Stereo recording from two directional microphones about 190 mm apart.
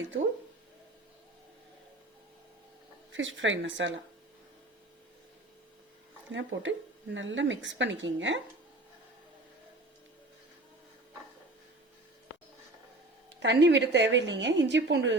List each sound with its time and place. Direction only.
3.1 s speech: 80° right
6.3 s speech: 85° right
13.4 s a woman's voice: 70° right (ahead or behind)